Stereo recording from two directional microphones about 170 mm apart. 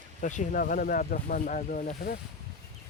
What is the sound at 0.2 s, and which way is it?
Speech, 50° left (ahead or behind).